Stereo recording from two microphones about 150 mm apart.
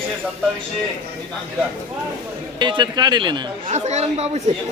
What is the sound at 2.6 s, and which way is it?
Speech, 30° right (ahead or behind).